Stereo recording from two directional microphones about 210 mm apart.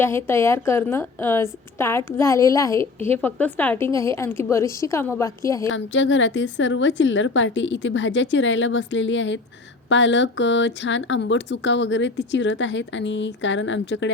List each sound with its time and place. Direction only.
0.0 s a woman's voice: 10° left (ahead or behind)
5.7 s speech: 60° left (ahead or behind)